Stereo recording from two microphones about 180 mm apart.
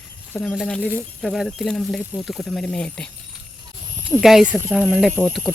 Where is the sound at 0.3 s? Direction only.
5° left (ahead or behind).